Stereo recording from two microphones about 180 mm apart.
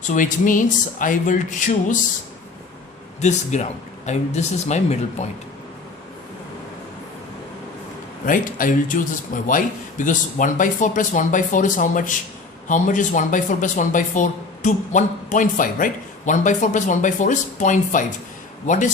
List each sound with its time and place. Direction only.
0.1 s speech: 45° left (ahead or behind)
3.2 s speech: 40° left (ahead or behind)
8.3 s speech: 50° left (ahead or behind)